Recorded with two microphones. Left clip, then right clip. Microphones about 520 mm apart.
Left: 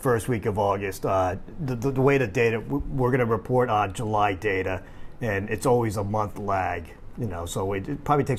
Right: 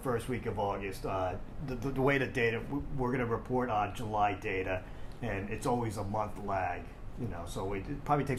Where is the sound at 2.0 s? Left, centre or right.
Left.